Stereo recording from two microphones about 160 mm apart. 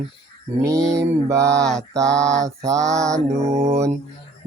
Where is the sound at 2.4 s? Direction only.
20° right (ahead or behind).